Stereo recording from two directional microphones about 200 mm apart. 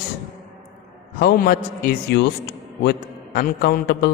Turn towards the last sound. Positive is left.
turn(degrees=50)  # may be behind; listen again after turning